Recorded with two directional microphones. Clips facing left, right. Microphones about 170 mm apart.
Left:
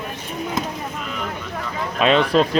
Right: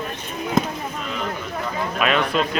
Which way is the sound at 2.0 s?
30° left (ahead or behind).